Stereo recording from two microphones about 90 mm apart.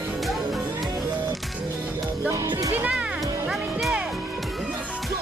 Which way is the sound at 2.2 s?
25° right (ahead or behind).